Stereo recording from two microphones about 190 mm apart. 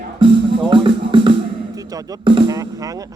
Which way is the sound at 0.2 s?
25° right (ahead or behind).